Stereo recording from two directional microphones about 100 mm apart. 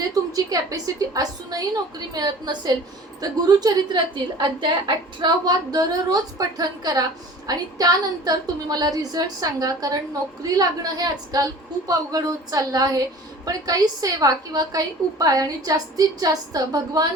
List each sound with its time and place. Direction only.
0.1 s a woman's voice: 40° right (ahead or behind)